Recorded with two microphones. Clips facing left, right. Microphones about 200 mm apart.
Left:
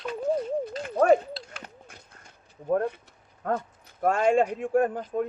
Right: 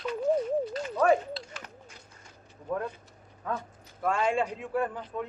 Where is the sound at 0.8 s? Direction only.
55° left (ahead or behind).